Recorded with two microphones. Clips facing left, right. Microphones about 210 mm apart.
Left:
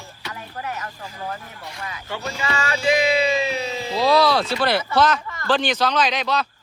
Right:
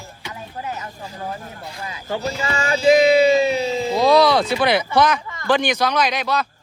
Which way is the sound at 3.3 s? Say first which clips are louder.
Right 6 dB; 30° right (ahead or behind).